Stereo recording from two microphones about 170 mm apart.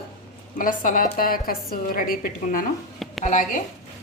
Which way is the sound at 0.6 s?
55° left (ahead or behind).